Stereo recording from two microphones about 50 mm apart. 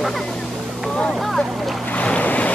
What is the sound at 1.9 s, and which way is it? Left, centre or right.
Boat, left.